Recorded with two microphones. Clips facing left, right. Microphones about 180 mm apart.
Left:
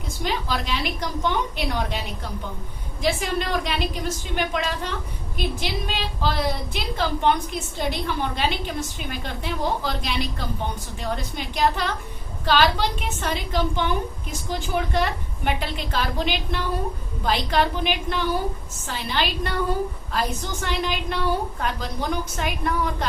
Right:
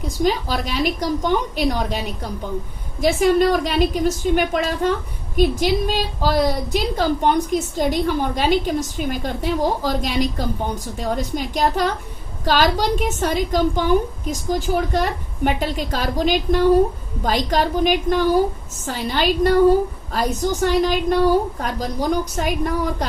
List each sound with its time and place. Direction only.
0.3 s a woman's voice: 40° right (ahead or behind)
3.0 s a woman's voice: 45° right (ahead or behind)